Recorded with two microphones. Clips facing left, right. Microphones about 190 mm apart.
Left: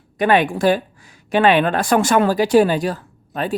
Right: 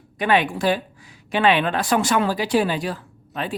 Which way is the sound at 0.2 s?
45° left (ahead or behind).